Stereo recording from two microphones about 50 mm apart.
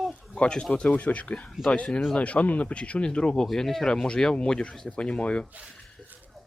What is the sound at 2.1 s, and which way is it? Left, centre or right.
Speech, left.